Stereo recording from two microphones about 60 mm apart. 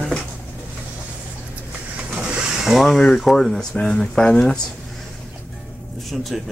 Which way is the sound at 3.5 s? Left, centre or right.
Centre.